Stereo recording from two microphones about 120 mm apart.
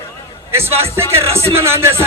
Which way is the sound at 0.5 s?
20° right (ahead or behind).